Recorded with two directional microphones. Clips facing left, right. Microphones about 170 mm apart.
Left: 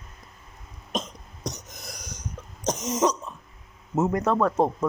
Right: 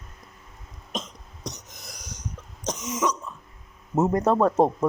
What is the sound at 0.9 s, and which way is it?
Cough, 45° left (ahead or behind).